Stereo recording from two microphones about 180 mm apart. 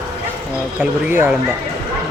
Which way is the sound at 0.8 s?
10° right (ahead or behind).